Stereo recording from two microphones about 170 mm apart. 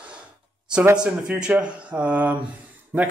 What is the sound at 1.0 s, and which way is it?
Speech, 5° right (ahead or behind).